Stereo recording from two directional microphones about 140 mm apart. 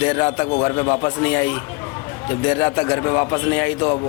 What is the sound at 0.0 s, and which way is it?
Speech, 10° left (ahead or behind).